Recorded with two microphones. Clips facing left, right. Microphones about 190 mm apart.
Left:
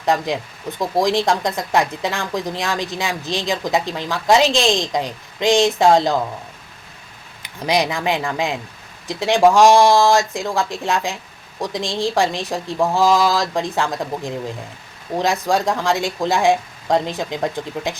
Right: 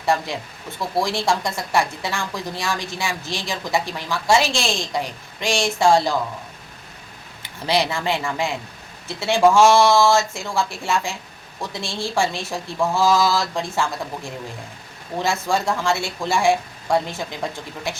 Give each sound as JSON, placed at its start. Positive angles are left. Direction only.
{"t": 0.0, "sound": "a woman's voice", "side_deg": 20}
{"t": 7.4, "sound": "a woman's voice", "side_deg": 15}